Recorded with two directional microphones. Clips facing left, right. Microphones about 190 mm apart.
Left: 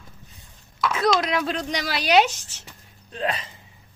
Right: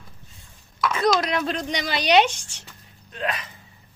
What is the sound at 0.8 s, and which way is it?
A woman's voice, centre (ahead or behind).